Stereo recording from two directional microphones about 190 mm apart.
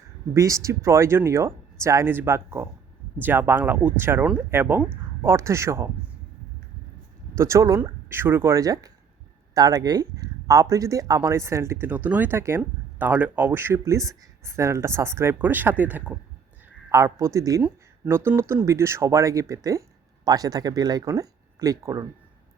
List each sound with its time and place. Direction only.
0.3 s speech: 15° right (ahead or behind)
7.3 s speech: 15° right (ahead or behind)